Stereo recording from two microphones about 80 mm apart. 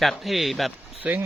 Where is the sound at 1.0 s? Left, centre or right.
Right.